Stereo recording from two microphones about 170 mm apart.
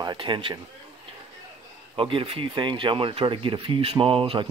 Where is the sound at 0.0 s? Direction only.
25° right (ahead or behind).